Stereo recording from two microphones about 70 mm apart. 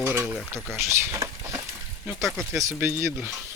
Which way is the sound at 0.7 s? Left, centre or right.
Right.